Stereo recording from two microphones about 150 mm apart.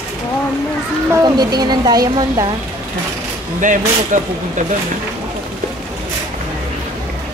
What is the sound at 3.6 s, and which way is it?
Speech, 55° right (ahead or behind).